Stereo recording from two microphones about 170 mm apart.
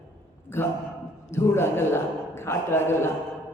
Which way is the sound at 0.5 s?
10° left (ahead or behind).